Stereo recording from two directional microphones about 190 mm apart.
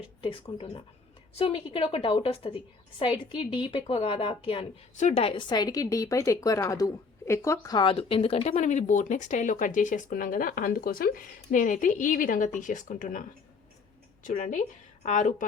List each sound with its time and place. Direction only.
0.2 s a woman's voice: 30° left (ahead or behind); by 13.2 s 45° left (ahead or behind)
14.3 s a woman's voice: 45° left (ahead or behind)